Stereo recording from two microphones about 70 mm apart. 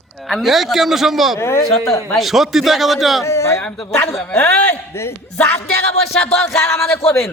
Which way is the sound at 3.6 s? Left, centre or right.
Centre.